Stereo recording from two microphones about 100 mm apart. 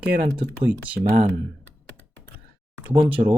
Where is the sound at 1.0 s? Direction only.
25° left (ahead or behind).